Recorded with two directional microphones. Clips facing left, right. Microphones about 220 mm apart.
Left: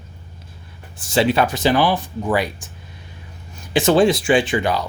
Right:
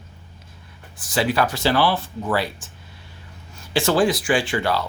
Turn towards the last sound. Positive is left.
turn(degrees=15)  # may be behind; listen again after turning